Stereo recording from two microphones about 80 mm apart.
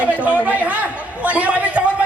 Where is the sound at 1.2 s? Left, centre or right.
Centre.